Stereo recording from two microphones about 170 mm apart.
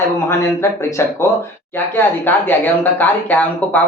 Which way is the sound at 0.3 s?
15° left (ahead or behind).